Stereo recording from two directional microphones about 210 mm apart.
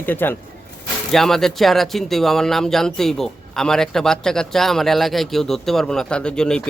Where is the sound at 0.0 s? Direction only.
10° left (ahead or behind).